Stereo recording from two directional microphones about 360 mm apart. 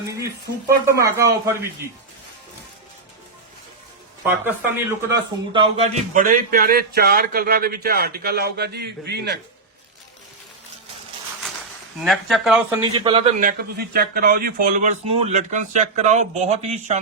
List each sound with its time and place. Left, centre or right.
0.9 s speech: centre
4.3 s speech: centre
5.5 s speech: centre
11.9 s speech: centre
12.9 s speech: centre
15.0 s a man's voice: right
15.3 s speech: centre